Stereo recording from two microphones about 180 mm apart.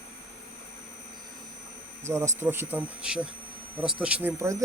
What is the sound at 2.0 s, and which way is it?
Speech, 15° right (ahead or behind).